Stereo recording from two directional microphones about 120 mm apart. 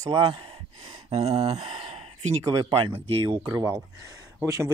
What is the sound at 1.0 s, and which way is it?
Speech, 60° right (ahead or behind).